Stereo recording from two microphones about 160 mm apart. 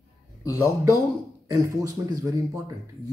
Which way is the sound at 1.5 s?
20° right (ahead or behind).